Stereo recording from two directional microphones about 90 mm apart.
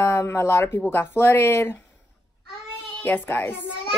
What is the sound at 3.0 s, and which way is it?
Speech, 20° left (ahead or behind).